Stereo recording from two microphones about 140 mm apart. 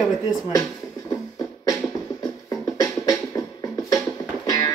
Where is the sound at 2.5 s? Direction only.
25° left (ahead or behind).